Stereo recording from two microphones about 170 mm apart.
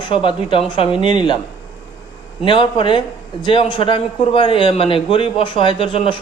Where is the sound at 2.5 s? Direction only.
30° left (ahead or behind).